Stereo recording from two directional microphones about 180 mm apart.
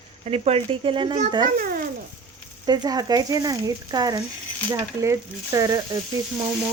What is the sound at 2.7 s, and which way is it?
Speech, 20° right (ahead or behind).